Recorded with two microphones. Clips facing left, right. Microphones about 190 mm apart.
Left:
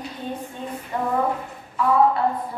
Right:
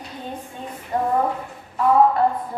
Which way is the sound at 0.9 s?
40° right (ahead or behind).